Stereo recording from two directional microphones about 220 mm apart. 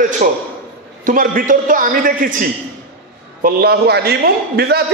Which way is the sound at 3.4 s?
45° right (ahead or behind).